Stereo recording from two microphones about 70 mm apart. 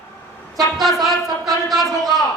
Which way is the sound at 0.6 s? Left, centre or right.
Centre.